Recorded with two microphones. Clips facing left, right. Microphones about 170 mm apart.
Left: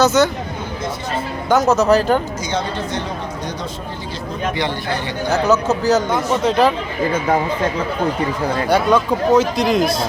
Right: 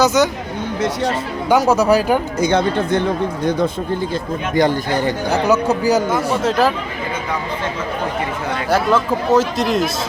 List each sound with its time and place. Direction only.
0.0 s speech: 15° right (ahead or behind)
1.5 s speech: 10° right (ahead or behind)
2.4 s speech: 60° right (ahead or behind)
4.5 s speech: 45° right (ahead or behind)
5.5 s speech: 10° right (ahead or behind)
8.7 s speech: centre (ahead or behind)